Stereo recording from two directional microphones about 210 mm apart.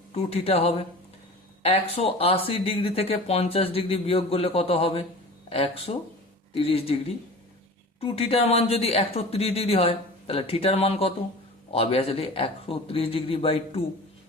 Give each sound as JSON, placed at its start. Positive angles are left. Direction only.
{"t": 0.1, "sound": "speech", "side_deg": 30}
{"t": 8.0, "sound": "speech", "side_deg": 30}